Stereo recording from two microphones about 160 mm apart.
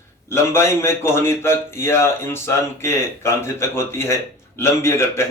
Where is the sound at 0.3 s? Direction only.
15° left (ahead or behind).